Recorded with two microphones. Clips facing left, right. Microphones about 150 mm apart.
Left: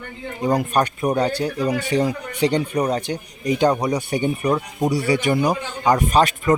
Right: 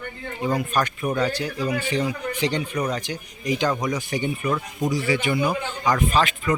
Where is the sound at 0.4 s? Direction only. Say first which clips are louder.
Left 4 dB; 40° left (ahead or behind).